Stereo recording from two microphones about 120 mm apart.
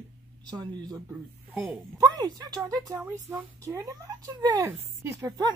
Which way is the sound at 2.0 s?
35° right (ahead or behind).